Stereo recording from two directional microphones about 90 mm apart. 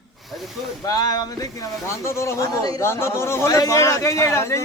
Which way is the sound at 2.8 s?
30° left (ahead or behind).